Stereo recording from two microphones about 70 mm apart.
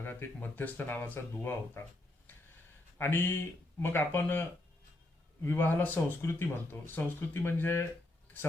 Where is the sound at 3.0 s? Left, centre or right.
Left.